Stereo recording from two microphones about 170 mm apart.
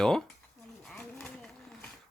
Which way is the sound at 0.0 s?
5° left (ahead or behind).